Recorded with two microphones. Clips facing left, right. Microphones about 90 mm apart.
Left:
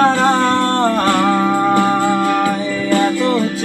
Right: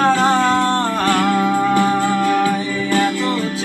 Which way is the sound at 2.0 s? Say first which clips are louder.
Left 1 dB; 20° left (ahead or behind).